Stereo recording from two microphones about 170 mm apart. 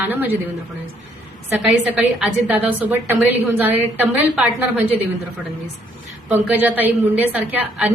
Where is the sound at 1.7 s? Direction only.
5° right (ahead or behind).